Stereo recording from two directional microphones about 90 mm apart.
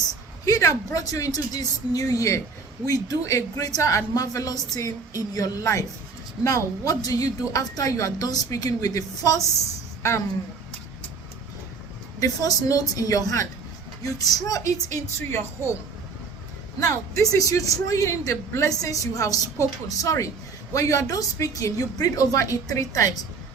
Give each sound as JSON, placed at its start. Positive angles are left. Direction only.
{"t": 0.4, "sound": "speech", "side_deg": 40}
{"t": 12.2, "sound": "speech", "side_deg": 40}
{"t": 16.8, "sound": "speech", "side_deg": 35}